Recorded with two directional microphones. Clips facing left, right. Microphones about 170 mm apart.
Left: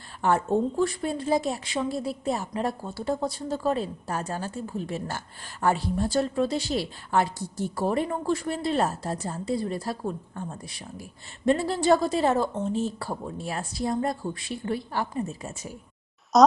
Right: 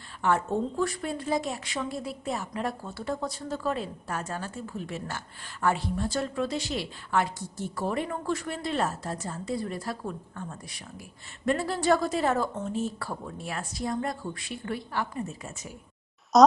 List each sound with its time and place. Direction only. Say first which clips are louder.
0.2 s a woman's voice: left 3 dB; 30° left (ahead or behind)
16.3 s speech: even; centre (ahead or behind)